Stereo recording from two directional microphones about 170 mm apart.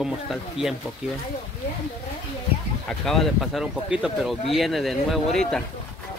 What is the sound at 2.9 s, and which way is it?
Speech, centre (ahead or behind).